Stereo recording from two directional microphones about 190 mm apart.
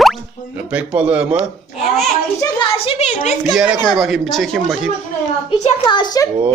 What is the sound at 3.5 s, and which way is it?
Speech, centre (ahead or behind).